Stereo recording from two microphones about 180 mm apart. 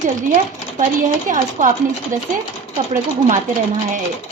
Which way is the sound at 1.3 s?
45° right (ahead or behind).